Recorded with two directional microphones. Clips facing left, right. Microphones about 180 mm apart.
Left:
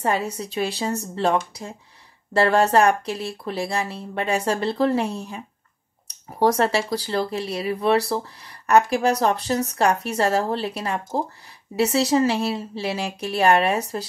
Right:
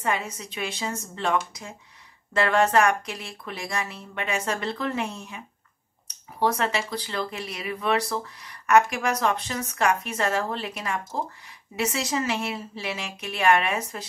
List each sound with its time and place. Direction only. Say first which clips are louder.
0.0 s speech: left 5 dB; 35° left (ahead or behind)
6.4 s speech: left 5 dB; 40° left (ahead or behind)